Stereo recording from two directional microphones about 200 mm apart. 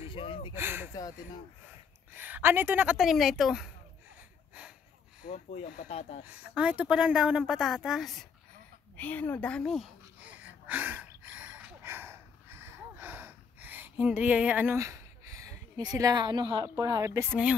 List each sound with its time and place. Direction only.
0.1 s a sound: 25° left (ahead or behind)
0.6 s speech: 10° right (ahead or behind)
2.1 s speech: 10° right (ahead or behind)
5.3 s speech: 35° left (ahead or behind)
6.2 s speech: 5° right (ahead or behind)
8.9 s a sound: 10° left (ahead or behind); by 17.6 s 10° right (ahead or behind)